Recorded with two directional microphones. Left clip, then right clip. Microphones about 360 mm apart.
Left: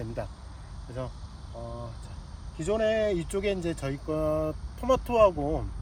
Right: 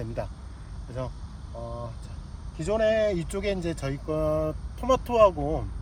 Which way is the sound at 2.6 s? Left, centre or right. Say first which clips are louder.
Right 3 dB; centre.